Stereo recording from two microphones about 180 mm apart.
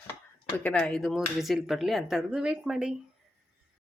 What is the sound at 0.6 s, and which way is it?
Speech, 5° left (ahead or behind).